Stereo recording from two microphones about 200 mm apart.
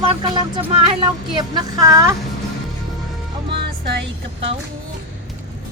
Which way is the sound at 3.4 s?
55° right (ahead or behind).